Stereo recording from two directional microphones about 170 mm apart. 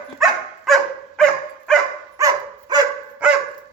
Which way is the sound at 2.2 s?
20° right (ahead or behind).